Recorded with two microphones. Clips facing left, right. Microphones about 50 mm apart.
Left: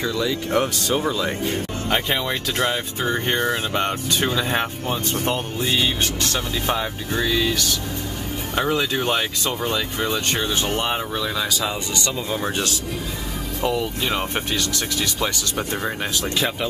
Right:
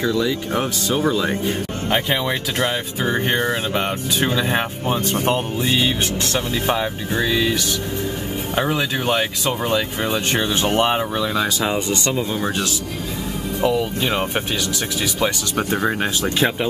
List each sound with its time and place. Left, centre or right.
0.0 s speech: centre
11.6 s speech: right
12.2 s speech: centre
13.6 s speech: centre; by 16.5 s right